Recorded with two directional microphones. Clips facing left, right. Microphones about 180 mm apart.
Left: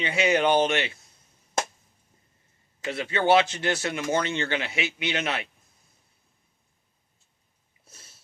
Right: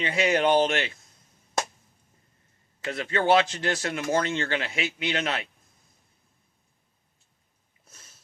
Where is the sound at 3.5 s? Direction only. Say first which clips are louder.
Left 1 dB; 25° left (ahead or behind).